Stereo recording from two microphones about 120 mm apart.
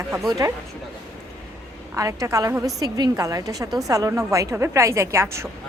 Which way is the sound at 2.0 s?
25° right (ahead or behind).